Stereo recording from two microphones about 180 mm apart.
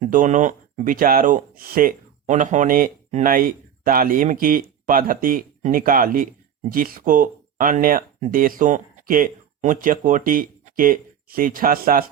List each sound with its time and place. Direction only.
0.0 s speech: 45° right (ahead or behind)